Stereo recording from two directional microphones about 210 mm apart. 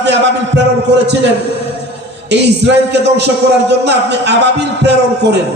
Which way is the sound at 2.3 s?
55° right (ahead or behind).